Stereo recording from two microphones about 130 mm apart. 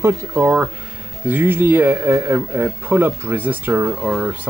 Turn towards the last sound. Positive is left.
turn(degrees=-10)  # may be behind; listen again after turning